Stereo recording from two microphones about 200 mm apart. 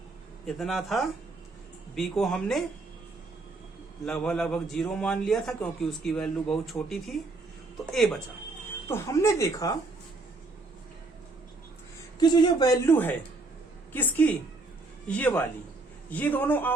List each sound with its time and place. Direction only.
0.4 s a man's voice: centre (ahead or behind)
4.0 s a man's voice: 5° left (ahead or behind)
8.9 s a man's voice: 15° left (ahead or behind)
12.2 s a man's voice: 20° left (ahead or behind)